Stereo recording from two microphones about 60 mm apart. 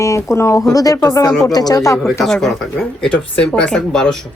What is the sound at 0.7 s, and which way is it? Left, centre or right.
Speech, left.